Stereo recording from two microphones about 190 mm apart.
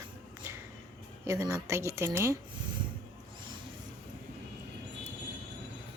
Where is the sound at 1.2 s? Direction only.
15° right (ahead or behind).